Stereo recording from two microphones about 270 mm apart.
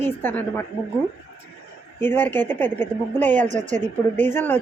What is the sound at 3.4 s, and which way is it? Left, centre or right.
Speech, right.